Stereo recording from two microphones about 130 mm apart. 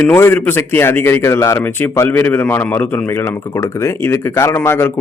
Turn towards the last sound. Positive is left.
turn(degrees=15)  # may be behind; listen again after turning